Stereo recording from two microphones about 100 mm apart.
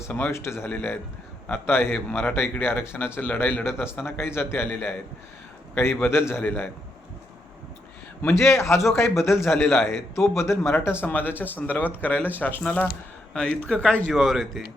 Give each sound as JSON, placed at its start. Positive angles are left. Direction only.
{"t": 0.1, "sound": "a man's voice", "side_deg": 25}
{"t": 8.3, "sound": "a man's voice", "side_deg": 30}